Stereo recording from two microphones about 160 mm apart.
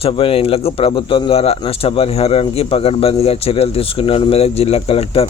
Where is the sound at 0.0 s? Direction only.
35° left (ahead or behind).